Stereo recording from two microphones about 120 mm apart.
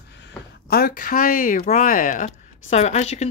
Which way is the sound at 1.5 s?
90° left.